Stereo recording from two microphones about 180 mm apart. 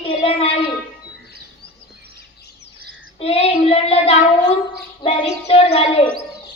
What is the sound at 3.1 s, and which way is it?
A woman's voice, 35° left (ahead or behind).